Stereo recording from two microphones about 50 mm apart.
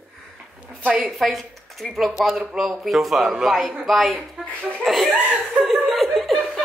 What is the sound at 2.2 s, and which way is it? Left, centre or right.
Speech, centre.